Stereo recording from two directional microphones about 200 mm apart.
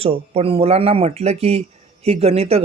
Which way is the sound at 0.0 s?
30° right (ahead or behind).